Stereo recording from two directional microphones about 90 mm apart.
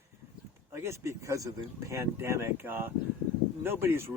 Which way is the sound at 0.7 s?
30° right (ahead or behind).